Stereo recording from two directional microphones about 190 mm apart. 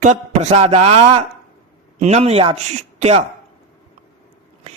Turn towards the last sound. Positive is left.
turn(degrees=-35)  # may be behind; listen again after turning